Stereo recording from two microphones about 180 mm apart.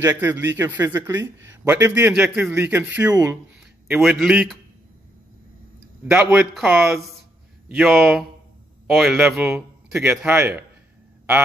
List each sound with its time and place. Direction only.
0.0 s a man's voice: 15° right (ahead or behind)
6.0 s a man's voice: 10° right (ahead or behind)